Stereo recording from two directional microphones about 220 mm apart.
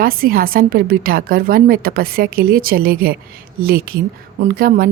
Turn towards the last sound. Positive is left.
turn(degrees=-40)  # may be behind; listen again after turning